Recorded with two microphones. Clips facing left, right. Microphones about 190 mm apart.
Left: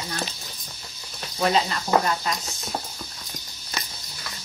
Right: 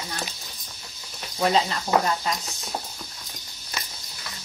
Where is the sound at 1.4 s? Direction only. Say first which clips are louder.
Even; 25° right (ahead or behind).